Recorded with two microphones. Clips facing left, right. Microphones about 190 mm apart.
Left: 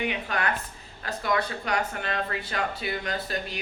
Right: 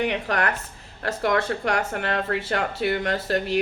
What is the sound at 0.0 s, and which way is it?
A woman's voice, 70° right (ahead or behind).